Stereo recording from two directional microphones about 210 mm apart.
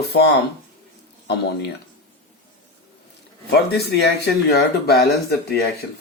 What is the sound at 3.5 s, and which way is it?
Speech, 50° left (ahead or behind).